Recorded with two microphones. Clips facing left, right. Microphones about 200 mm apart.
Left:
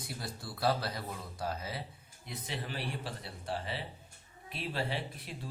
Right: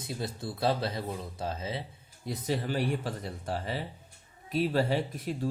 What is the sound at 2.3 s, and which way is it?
Speech, 40° right (ahead or behind).